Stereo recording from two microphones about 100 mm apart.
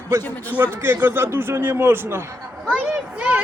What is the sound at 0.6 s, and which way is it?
A man's voice, 20° right (ahead or behind).